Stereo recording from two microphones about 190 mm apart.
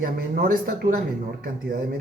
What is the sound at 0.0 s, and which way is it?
Speech, 50° right (ahead or behind).